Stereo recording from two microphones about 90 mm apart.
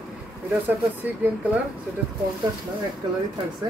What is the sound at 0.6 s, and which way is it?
Speech, 20° right (ahead or behind).